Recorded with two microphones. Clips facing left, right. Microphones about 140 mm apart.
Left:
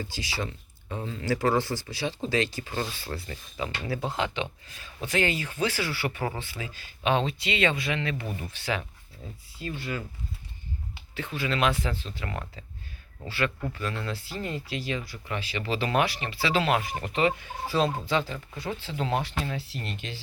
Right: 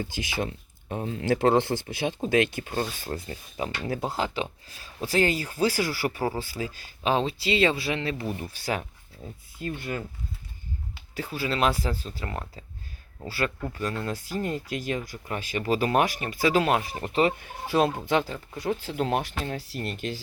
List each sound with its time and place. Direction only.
0.1 s speech: 55° right (ahead or behind)
9.6 s speech: 50° right (ahead or behind)
11.1 s speech: 35° right (ahead or behind)
17.4 s speech: 50° right (ahead or behind)
18.5 s speech: 45° right (ahead or behind)